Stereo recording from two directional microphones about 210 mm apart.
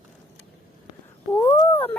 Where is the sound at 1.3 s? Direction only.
15° left (ahead or behind).